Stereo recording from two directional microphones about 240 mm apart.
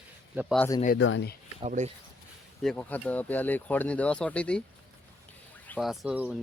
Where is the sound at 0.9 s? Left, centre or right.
Left.